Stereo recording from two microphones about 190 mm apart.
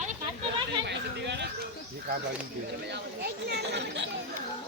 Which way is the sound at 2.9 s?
60° right (ahead or behind).